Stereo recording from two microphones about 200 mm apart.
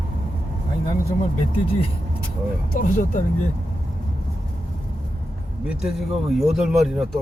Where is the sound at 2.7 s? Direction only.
40° left (ahead or behind).